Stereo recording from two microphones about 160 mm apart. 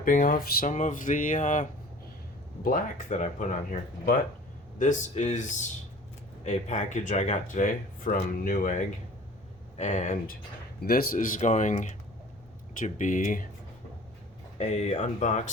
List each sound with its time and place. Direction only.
0.0 s speech: 55° left (ahead or behind)
2.6 s speech: 45° left (ahead or behind)
9.7 s speech: 45° left (ahead or behind)
10.8 s speech: 65° left (ahead or behind)
14.6 s speech: 45° left (ahead or behind)